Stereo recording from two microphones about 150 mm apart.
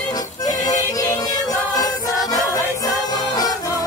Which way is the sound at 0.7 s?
25° left (ahead or behind).